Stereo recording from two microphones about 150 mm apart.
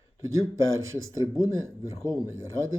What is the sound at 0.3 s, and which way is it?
Speech, 20° right (ahead or behind).